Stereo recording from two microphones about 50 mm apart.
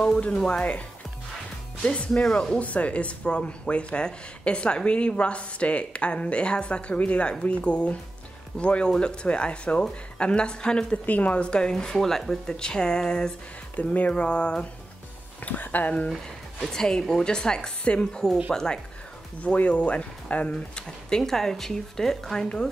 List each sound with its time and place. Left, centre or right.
0.5 s speech: left
11.1 s speech: left; by 13.3 s centre
13.7 s speech: left
15.4 s speech: left
16.6 s speech: centre
18.5 s speech: centre
19.4 s speech: left
21.2 s speech: centre